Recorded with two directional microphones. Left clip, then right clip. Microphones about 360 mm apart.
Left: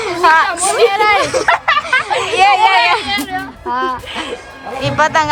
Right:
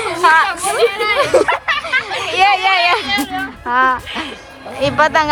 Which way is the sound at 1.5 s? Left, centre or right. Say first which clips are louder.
Left 4 dB; left.